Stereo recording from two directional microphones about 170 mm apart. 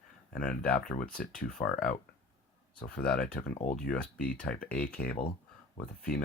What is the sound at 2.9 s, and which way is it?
Speech, 5° left (ahead or behind).